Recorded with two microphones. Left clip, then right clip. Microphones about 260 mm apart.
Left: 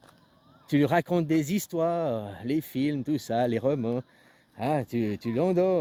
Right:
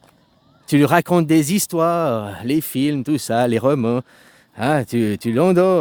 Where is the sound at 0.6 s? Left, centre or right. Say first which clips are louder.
Right 9 dB; right.